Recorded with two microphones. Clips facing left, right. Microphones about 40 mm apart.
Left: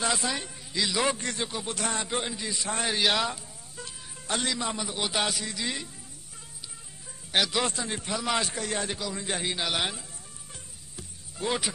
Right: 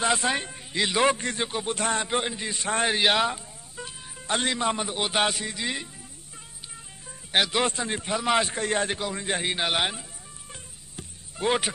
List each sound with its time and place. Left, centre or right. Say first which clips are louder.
0.0 s a man's voice: right 4 dB; right
2.9 s music: right 2 dB; right
4.4 s a man's voice: right 5 dB; right
7.3 s a man's voice: right 3 dB; right
8.5 s a man's voice: right 5 dB; right
10.5 s music: right 4 dB; right